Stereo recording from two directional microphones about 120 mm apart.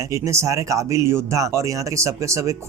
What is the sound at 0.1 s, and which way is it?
Speech, 25° right (ahead or behind).